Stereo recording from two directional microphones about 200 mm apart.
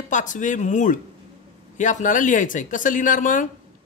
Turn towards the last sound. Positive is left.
turn(degrees=40)  # may be behind; listen again after turning